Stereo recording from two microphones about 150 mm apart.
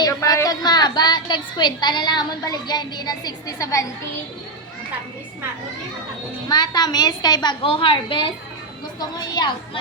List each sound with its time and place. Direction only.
0.0 s a woman's voice: 25° left (ahead or behind)
6.5 s a woman's voice: 25° left (ahead or behind)